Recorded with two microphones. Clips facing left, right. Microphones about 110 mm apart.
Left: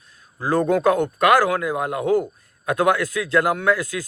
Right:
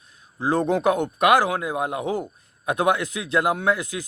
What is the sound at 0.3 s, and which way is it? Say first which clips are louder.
A man's voice: left 2 dB; 20° right (ahead or behind).